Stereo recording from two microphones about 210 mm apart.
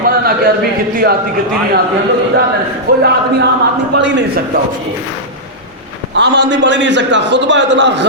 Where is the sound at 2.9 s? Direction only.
45° right (ahead or behind).